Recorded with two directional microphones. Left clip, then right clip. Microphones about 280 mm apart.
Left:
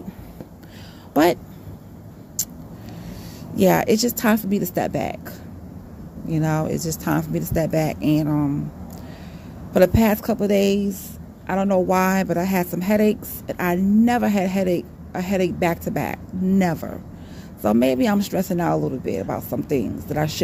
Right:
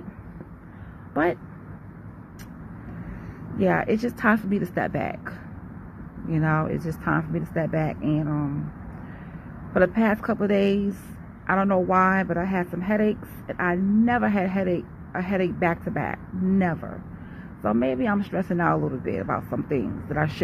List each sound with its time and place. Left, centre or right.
1.1 s speech: left
3.5 s speech: left
9.8 s speech: centre